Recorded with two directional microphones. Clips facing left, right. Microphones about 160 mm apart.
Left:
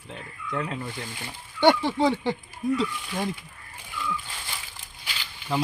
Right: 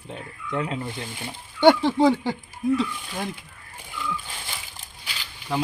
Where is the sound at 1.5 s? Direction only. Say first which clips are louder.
Right 4 dB; 10° right (ahead or behind).